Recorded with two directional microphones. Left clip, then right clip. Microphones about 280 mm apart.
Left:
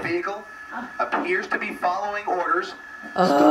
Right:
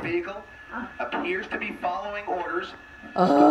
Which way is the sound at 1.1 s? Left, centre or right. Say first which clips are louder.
Left 5 dB; centre.